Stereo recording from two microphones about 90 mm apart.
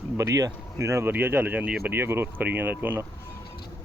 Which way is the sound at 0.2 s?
40° right (ahead or behind).